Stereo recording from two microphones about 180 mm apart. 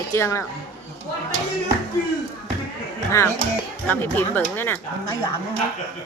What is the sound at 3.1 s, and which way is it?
Speech, 15° left (ahead or behind).